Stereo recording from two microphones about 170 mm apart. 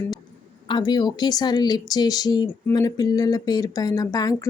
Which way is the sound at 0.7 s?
25° left (ahead or behind).